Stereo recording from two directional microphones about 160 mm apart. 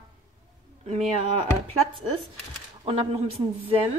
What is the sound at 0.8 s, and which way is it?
Speech, 40° right (ahead or behind).